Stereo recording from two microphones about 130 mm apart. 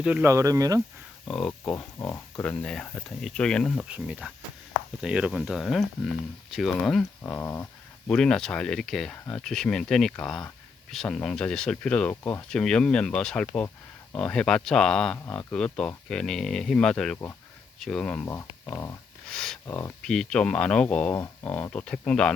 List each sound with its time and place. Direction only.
0.0 s speech: 10° right (ahead or behind)
0.3 s speech: 25° right (ahead or behind)
1.3 s speech: 5° left (ahead or behind)
3.8 s speech: 10° right (ahead or behind)
7.2 s dog: 15° left (ahead or behind)
8.1 s speech: 5° left (ahead or behind)
18.3 s speech: 20° left (ahead or behind)
19.3 s speech: 5° left (ahead or behind)
19.6 s speech: 20° left (ahead or behind)
20.0 s speech: 5° left (ahead or behind)